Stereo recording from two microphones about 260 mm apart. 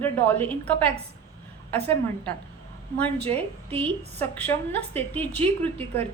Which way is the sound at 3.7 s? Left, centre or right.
Right.